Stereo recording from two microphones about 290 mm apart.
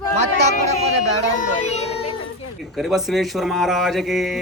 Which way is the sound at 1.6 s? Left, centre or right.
Left.